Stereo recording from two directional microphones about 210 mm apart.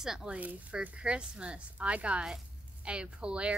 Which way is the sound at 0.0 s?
5° right (ahead or behind).